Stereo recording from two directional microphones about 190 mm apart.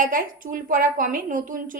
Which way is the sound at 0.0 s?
45° right (ahead or behind).